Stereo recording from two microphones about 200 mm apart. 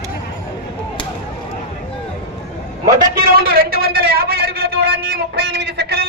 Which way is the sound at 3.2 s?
50° right (ahead or behind).